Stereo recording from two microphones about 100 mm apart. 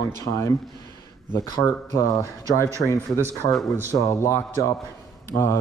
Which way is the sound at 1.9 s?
35° right (ahead or behind).